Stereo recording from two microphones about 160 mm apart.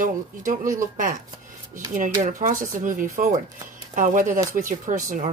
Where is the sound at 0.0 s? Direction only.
55° right (ahead or behind).